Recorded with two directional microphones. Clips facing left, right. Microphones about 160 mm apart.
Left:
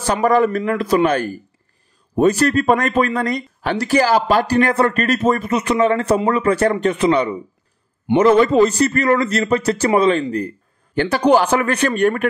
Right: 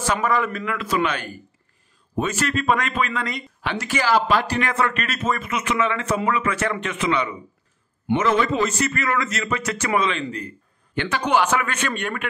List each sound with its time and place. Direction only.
0.0 s speech: 35° left (ahead or behind)